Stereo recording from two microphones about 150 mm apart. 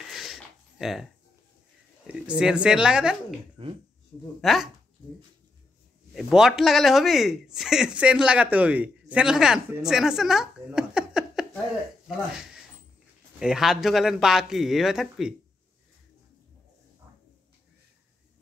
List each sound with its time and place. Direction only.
0.1 s a sound: centre (ahead or behind)
2.0 s speech: 5° right (ahead or behind)
3.6 s speech: 35° right (ahead or behind)
4.4 s speech: centre (ahead or behind)
6.1 s speech: 5° right (ahead or behind)
13.4 s speech: 5° right (ahead or behind)